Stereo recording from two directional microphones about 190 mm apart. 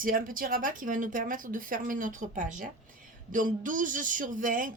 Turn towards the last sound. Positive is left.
turn(degrees=-45)  # may be behind; listen again after turning